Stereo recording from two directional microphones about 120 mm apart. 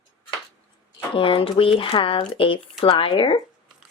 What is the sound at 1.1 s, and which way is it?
Speech, 45° left (ahead or behind).